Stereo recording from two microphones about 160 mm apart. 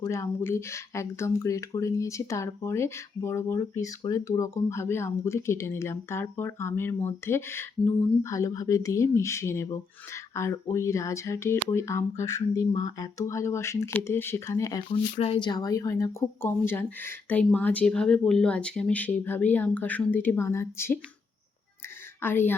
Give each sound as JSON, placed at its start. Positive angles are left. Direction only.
{"t": 0.0, "sound": "speech", "side_deg": 15}
{"t": 15.2, "sound": "speech", "side_deg": 35}
{"t": 22.2, "sound": "speech", "side_deg": 15}